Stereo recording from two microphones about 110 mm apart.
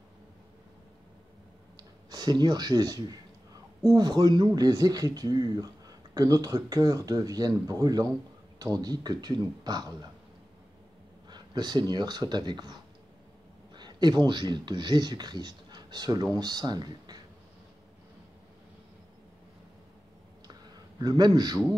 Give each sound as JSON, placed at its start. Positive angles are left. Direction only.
{"t": 2.0, "sound": "speech", "side_deg": -40}
{"t": 11.2, "sound": "speech", "side_deg": -40}
{"t": 13.7, "sound": "speech", "side_deg": -40}
{"t": 21.0, "sound": "speech", "side_deg": -40}